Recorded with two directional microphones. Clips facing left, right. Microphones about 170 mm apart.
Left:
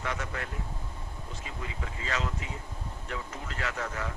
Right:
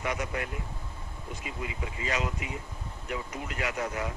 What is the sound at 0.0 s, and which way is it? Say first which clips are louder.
Speech: right 3 dB; 15° right (ahead or behind).